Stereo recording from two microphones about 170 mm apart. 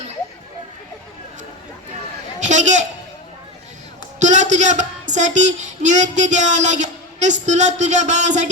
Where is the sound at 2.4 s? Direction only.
45° right (ahead or behind).